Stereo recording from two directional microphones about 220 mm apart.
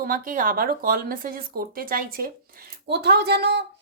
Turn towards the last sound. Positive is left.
turn(degrees=-50)  # may be behind; listen again after turning